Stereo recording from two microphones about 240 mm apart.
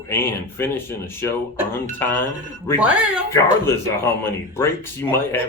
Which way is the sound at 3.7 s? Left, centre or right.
Centre.